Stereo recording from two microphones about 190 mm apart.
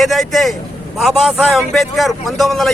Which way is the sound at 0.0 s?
Centre (ahead or behind).